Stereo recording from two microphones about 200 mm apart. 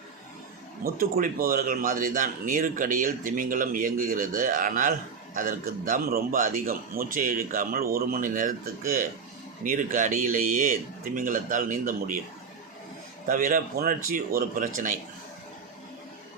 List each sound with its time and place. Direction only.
0.9 s a man's voice: 45° right (ahead or behind)
13.2 s a man's voice: 45° right (ahead or behind)